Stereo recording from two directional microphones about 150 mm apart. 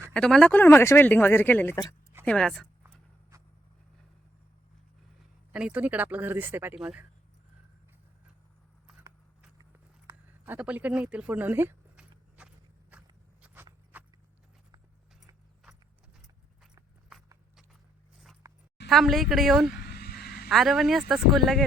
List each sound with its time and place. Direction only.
0.1 s speech: 5° left (ahead or behind)
5.5 s speech: 10° right (ahead or behind)
9.6 s biting: 25° right (ahead or behind)
10.4 s a sound: 10° right (ahead or behind)
13.4 s walk: 10° right (ahead or behind)
13.9 s horse: 10° right (ahead or behind)
18.4 s a sound: 25° right (ahead or behind)
18.9 s speech: centre (ahead or behind)
19.8 s vehicle: 90° left
20.5 s speech: centre (ahead or behind)